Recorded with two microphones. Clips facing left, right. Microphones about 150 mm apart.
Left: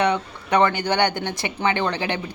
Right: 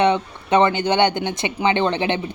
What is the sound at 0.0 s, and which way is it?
Speech, 25° right (ahead or behind).